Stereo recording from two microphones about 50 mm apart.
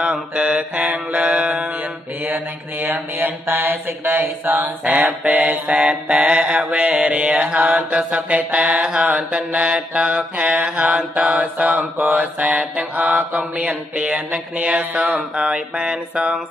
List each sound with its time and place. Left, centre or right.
0.0 s mantra: centre
2.2 s mantra: right
4.9 s mantra: right
13.9 s a sound: centre
14.6 s mantra: right